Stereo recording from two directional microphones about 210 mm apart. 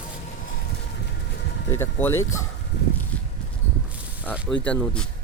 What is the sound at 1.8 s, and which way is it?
Speech, 10° left (ahead or behind).